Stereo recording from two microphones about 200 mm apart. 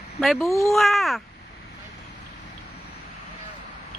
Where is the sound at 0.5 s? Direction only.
15° left (ahead or behind).